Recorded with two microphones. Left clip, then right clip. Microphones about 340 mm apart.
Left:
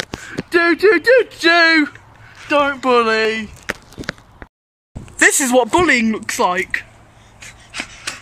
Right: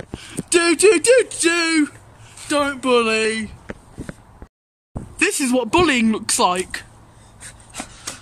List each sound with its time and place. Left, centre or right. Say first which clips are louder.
0.3 s speech: left 2 dB; centre
3.6 s walk: left 10 dB; left
5.2 s speech: left 6 dB; centre